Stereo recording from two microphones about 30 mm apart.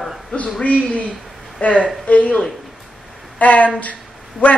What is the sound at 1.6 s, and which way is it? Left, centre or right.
Speech, left.